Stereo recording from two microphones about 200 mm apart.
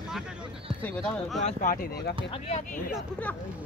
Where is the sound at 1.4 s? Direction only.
40° left (ahead or behind).